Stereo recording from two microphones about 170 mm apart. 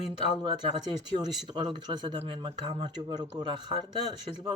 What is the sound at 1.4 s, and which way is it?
Speech, 25° right (ahead or behind).